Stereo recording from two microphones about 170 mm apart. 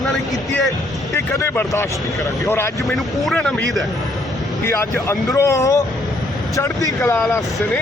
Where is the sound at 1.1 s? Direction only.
15° left (ahead or behind).